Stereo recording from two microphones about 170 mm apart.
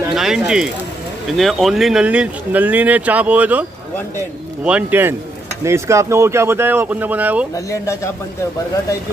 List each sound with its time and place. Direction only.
0.1 s a sound: centre (ahead or behind)
1.3 s speech: centre (ahead or behind)
4.6 s speech: 10° right (ahead or behind)
7.5 s speech: 20° left (ahead or behind)